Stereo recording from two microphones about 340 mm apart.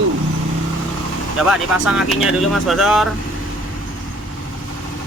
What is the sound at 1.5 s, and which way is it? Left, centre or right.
Speech, centre.